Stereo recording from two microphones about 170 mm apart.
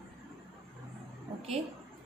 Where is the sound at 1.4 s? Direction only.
35° right (ahead or behind).